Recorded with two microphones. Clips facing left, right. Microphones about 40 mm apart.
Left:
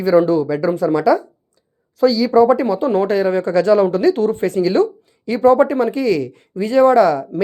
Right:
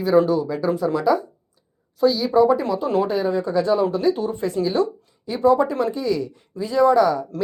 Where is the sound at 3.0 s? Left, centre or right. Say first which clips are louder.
Left 5 dB; left.